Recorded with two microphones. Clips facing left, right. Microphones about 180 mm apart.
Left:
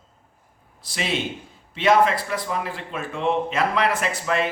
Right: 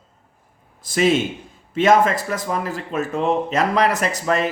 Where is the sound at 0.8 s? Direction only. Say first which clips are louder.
Right 9 dB; 45° right (ahead or behind).